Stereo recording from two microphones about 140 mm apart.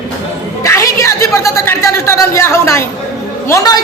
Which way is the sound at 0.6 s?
20° left (ahead or behind).